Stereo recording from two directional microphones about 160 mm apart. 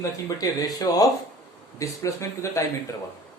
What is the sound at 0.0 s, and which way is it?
Speech, 20° left (ahead or behind).